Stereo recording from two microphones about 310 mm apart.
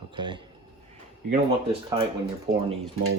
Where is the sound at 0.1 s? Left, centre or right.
Centre.